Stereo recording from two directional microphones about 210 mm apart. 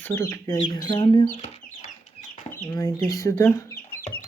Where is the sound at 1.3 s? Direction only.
30° left (ahead or behind).